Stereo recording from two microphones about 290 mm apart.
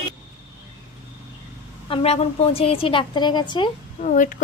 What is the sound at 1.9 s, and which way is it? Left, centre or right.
A woman's voice, left.